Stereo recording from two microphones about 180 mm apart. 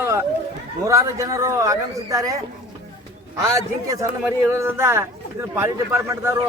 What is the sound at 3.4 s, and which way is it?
A man's voice, 15° right (ahead or behind).